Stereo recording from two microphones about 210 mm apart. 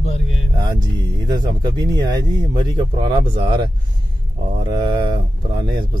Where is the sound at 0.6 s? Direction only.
20° right (ahead or behind).